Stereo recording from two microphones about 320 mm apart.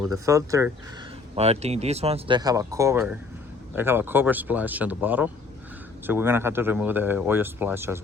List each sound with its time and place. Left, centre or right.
0.0 s speech: centre